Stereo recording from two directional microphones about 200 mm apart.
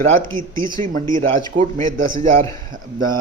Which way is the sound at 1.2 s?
40° right (ahead or behind).